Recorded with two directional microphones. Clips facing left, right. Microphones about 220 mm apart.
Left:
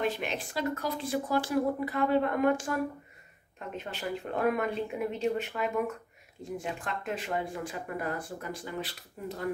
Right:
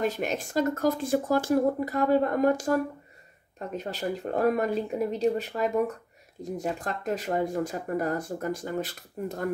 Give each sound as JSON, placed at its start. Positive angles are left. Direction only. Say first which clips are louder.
{"t": 0.0, "sound": "speech", "louder": "right 3 dB", "side_deg": -45}